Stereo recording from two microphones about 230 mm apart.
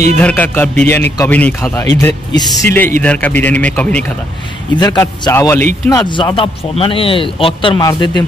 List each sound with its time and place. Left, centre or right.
0.2 s a man's voice: centre
4.7 s a man's voice: centre